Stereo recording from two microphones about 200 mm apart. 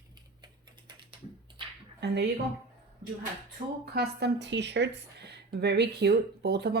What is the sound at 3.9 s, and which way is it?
A woman's voice, 55° right (ahead or behind).